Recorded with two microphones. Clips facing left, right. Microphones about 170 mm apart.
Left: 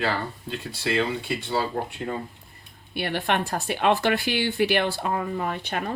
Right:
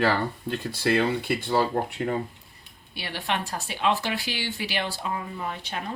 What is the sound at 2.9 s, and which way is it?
Speech, 55° left (ahead or behind).